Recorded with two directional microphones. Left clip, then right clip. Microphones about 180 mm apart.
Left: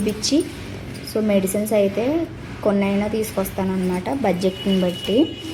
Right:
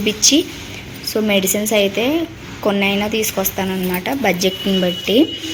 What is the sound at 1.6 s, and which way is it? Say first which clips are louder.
Speech: right 3 dB; 5° right (ahead or behind).